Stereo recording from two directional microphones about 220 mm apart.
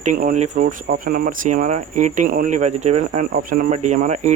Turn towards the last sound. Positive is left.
turn(degrees=-30)  # may be behind; listen again after turning